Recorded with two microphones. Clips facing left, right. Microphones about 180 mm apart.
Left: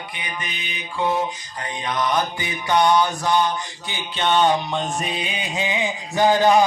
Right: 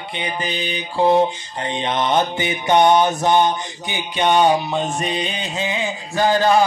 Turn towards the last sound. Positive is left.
turn(degrees=15)  # may be behind; listen again after turning